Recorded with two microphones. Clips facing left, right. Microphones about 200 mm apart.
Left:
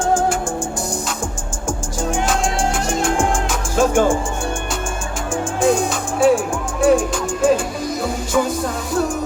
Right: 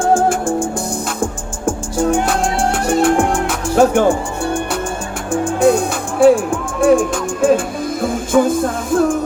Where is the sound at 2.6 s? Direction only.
60° right (ahead or behind).